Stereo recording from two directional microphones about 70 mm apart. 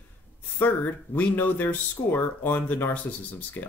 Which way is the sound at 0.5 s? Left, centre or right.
Left.